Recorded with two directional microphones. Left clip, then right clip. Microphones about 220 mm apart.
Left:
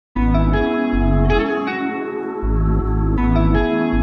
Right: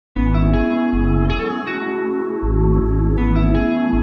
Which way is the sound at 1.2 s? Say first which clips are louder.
Left 4 dB; 40° right (ahead or behind).